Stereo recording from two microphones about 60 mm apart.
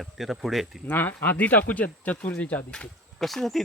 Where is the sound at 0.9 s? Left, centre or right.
Left; by 2.8 s centre.